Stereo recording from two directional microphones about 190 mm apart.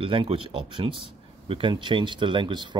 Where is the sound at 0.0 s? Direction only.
30° right (ahead or behind).